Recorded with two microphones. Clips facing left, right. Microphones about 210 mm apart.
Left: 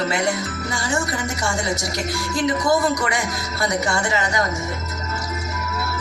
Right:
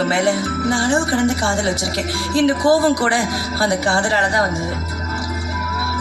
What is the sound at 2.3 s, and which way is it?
A woman's voice, 30° right (ahead or behind).